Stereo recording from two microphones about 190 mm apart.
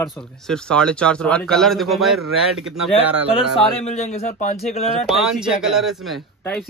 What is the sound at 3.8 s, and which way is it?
Speech, 35° left (ahead or behind).